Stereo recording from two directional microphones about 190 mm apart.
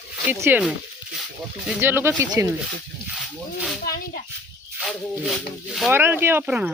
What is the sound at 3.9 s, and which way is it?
Speech, 50° left (ahead or behind).